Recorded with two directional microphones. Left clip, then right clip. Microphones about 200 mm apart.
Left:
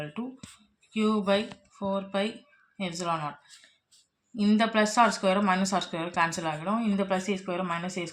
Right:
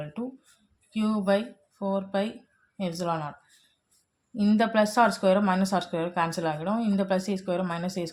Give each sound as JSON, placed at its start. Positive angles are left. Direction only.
{"t": 0.9, "sound": "speech", "side_deg": -45}
{"t": 4.4, "sound": "speech", "side_deg": -45}